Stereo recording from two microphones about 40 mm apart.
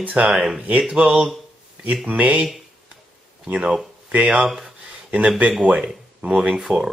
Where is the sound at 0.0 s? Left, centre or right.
Right.